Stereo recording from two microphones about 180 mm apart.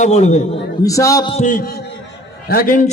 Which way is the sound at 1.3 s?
40° left (ahead or behind).